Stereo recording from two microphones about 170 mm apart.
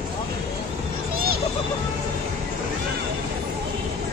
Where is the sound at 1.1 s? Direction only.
65° right (ahead or behind).